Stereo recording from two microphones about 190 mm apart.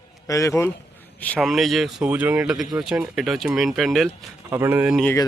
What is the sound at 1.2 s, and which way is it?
Speech, 5° left (ahead or behind).